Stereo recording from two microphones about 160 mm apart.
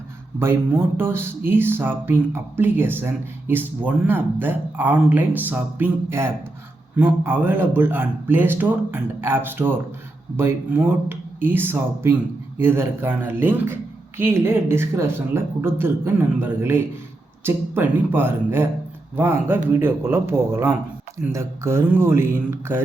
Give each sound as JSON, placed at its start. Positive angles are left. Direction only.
{"t": 0.9, "sound": "speech", "side_deg": -15}